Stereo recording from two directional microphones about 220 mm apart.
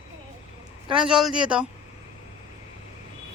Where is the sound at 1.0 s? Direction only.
5° right (ahead or behind).